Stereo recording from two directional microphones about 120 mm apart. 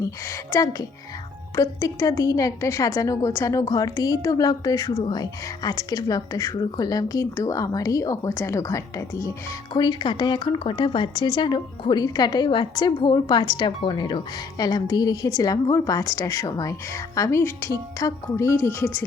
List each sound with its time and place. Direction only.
0.0 s speech: 25° left (ahead or behind)
9.7 s speech: 35° left (ahead or behind); by 19.0 s 20° left (ahead or behind)